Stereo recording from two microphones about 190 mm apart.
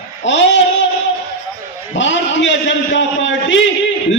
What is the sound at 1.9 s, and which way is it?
A man's voice, 75° left (ahead or behind).